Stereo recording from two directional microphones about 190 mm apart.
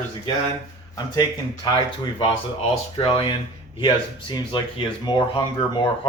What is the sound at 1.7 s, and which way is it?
Speech, 25° left (ahead or behind).